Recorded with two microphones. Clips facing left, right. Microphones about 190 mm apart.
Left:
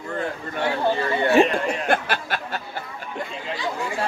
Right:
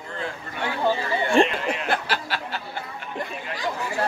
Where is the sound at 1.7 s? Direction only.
50° left (ahead or behind).